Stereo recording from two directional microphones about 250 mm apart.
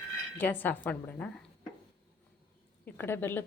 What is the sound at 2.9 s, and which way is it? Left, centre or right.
Speech, centre.